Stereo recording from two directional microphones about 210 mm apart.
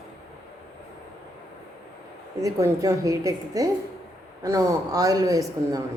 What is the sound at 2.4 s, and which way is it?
Speech, 15° right (ahead or behind).